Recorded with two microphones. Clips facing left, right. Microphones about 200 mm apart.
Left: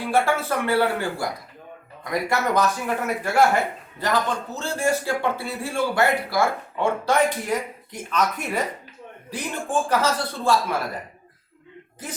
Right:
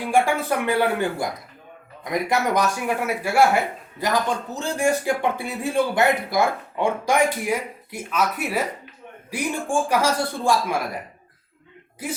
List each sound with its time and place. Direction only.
0.1 s speech: 15° right (ahead or behind)